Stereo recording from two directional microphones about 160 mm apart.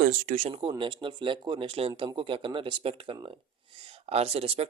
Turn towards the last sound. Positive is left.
turn(degrees=-40)  # may be behind; listen again after turning